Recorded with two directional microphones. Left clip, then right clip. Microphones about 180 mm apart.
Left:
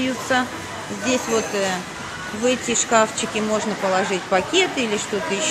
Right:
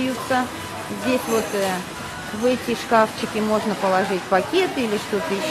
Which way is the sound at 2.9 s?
Centre (ahead or behind).